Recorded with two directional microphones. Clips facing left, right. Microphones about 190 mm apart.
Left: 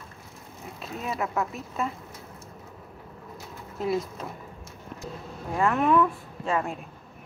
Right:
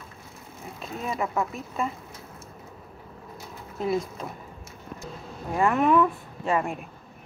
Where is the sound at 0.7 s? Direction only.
5° left (ahead or behind).